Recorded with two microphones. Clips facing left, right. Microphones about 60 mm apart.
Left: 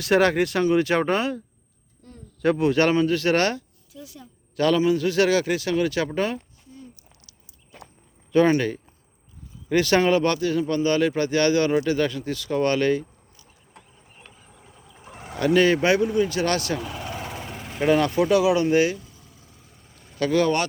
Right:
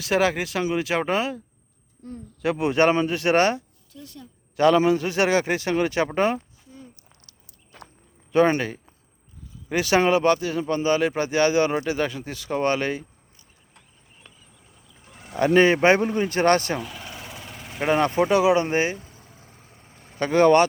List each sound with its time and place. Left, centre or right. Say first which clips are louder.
0.0 s speech: left 3 dB; centre
2.0 s a sound: right 9 dB; right
2.6 s speech: right 2 dB; right
3.9 s a woman's voice: even; centre
4.5 s a man's voice: right 2 dB; right
8.3 s speech: left 1 dB; right
15.0 s a sound: left 3 dB; left
15.4 s speech: right 2 dB; right
17.5 s vehicle: left 3 dB; centre
17.7 s vehicle: left 1 dB; right